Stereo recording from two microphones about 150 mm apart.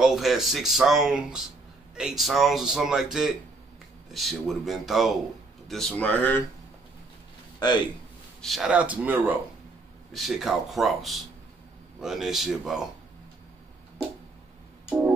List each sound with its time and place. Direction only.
0.0 s speech: centre (ahead or behind)
7.5 s speech: 30° left (ahead or behind)
8.4 s speech: centre (ahead or behind)
10.1 s speech: centre (ahead or behind)